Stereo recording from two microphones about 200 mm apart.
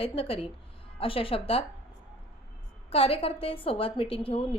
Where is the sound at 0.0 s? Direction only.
30° left (ahead or behind).